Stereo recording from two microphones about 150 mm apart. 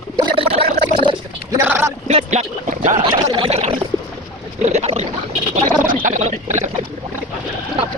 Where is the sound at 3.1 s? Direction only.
35° right (ahead or behind).